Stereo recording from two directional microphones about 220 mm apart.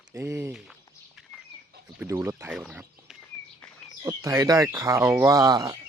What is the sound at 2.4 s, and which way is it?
Speech, 5° right (ahead or behind).